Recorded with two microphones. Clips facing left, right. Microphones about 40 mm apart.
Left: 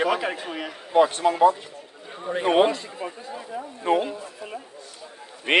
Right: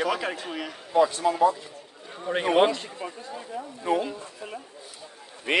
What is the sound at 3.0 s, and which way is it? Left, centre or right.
Speech, centre.